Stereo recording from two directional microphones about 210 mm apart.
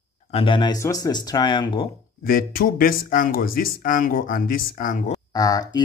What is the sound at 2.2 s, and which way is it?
Speech, 45° left (ahead or behind).